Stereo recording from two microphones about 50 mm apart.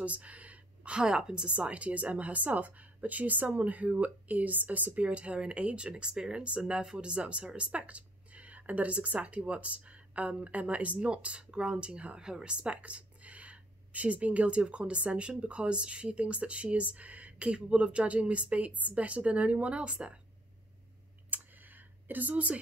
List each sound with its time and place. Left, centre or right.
0.0 s a sound: right
0.9 s a woman's voice: centre
21.3 s computer keyboard: right